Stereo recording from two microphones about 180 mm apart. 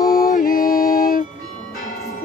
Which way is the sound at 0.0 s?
55° left (ahead or behind).